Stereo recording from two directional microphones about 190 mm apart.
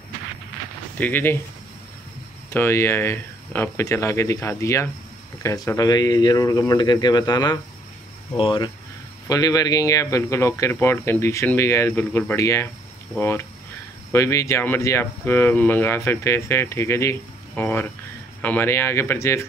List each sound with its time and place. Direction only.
0.9 s speech: 10° left (ahead or behind)
2.5 s speech: 15° left (ahead or behind)